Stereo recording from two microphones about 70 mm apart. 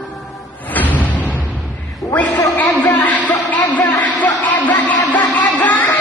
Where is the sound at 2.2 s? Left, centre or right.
Left.